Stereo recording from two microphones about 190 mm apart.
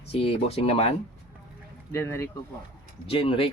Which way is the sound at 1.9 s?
15° left (ahead or behind).